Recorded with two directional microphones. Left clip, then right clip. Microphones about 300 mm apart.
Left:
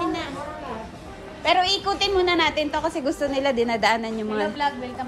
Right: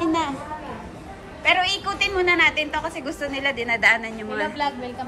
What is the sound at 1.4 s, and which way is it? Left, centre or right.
A woman's voice, centre.